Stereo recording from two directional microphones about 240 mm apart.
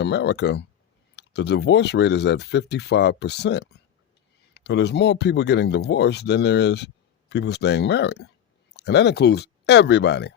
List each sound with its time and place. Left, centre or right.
0.0 s speech: left